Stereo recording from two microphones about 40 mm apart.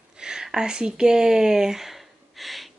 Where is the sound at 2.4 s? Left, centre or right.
Centre.